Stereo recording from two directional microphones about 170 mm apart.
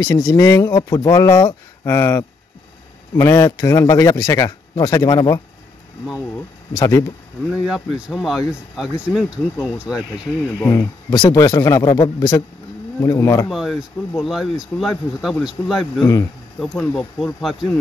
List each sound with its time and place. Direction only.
0.0 s speech: 20° left (ahead or behind)
6.7 s speech: 20° left (ahead or behind)
7.6 s speech: centre (ahead or behind)
10.6 s speech: 20° left (ahead or behind)
13.5 s speech: centre (ahead or behind)